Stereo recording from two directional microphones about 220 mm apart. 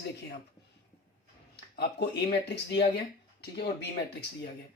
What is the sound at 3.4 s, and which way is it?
Speech, 50° left (ahead or behind).